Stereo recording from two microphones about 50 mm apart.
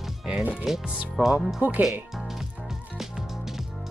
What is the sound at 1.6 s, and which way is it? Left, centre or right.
Speech, right.